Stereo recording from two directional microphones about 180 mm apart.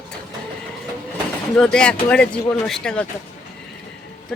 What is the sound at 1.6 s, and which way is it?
A woman's voice, 5° left (ahead or behind).